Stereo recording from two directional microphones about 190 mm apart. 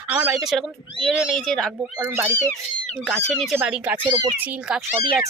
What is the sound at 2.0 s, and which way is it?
Speech, 10° right (ahead or behind).